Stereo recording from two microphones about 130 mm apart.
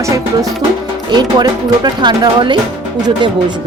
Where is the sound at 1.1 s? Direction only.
35° right (ahead or behind).